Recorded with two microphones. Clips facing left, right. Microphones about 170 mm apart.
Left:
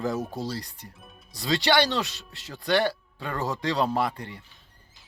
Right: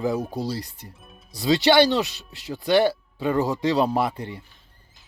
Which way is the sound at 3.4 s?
5° right (ahead or behind).